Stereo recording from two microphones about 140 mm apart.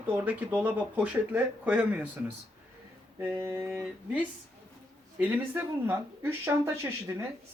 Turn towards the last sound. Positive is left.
turn(degrees=-20)  # may be behind; listen again after turning